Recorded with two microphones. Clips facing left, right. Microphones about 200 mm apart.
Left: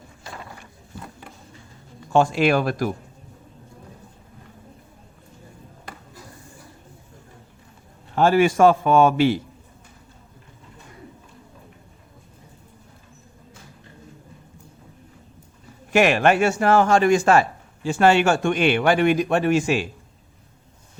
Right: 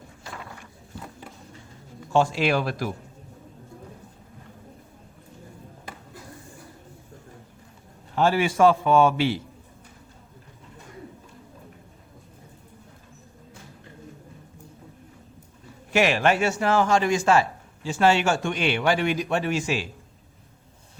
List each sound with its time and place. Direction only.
2.1 s speech: 55° left (ahead or behind)
8.1 s speech: 50° left (ahead or behind)
15.9 s a man's voice: 55° left (ahead or behind)